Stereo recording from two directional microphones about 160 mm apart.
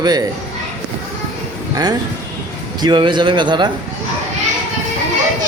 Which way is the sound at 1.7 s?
25° right (ahead or behind).